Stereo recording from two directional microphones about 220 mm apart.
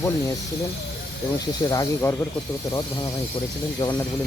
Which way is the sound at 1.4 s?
15° left (ahead or behind).